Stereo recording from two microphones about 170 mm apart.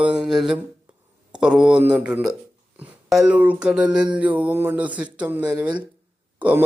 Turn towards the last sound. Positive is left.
turn(degrees=-10)  # may be behind; listen again after turning